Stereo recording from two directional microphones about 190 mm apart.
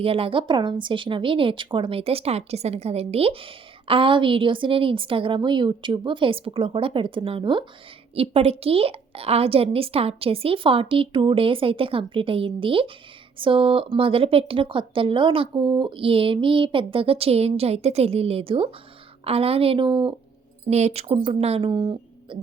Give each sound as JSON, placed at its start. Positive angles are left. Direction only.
{"t": 0.0, "sound": "speech", "side_deg": -30}